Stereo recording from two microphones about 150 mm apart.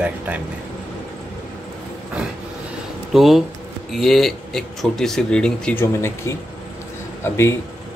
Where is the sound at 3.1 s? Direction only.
Centre (ahead or behind).